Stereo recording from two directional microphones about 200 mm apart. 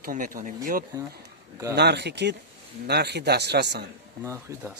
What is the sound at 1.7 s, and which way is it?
Speech, 55° right (ahead or behind).